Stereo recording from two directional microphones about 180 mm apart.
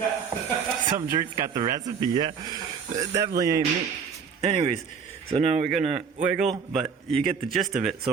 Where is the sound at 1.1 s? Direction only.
20° right (ahead or behind).